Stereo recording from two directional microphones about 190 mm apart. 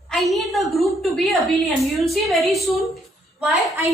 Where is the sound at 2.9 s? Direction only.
Centre (ahead or behind).